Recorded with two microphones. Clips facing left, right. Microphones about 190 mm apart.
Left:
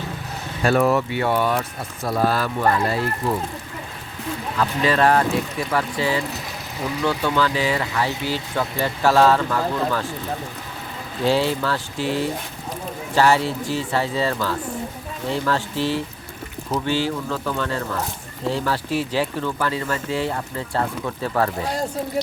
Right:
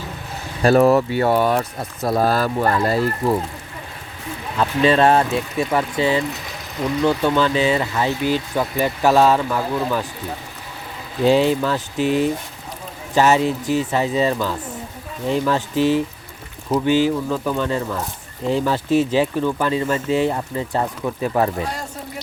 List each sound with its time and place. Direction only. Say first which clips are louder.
0.6 s speech: right 5 dB; 40° right (ahead or behind)
4.5 s speech: right 4 dB; 25° right (ahead or behind)
11.3 s speech: right 4 dB; 15° right (ahead or behind)